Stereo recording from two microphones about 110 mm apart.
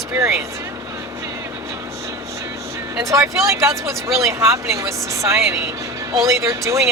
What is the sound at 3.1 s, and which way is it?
Speech, 25° right (ahead or behind).